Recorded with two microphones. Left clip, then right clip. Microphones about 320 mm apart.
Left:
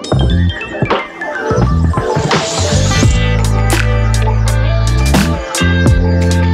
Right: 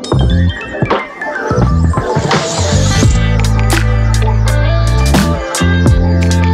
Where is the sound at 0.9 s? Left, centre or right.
Centre.